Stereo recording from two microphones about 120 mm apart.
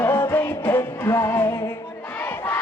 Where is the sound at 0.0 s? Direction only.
20° left (ahead or behind).